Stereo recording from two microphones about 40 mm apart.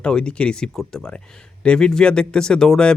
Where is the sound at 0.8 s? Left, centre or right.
Centre.